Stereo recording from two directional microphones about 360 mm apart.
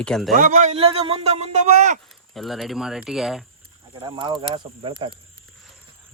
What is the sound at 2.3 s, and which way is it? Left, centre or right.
Speech, centre.